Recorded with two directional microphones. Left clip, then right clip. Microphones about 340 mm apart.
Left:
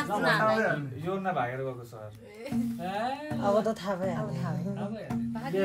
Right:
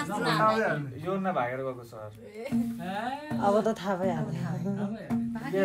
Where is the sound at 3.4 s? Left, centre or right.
Right.